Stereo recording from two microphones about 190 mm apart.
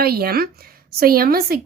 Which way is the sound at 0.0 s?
55° right (ahead or behind).